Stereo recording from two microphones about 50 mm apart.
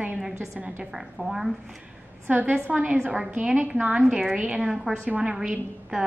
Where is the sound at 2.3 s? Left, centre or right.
Right.